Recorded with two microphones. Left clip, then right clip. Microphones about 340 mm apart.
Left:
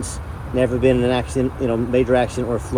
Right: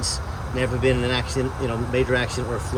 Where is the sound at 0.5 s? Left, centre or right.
Centre.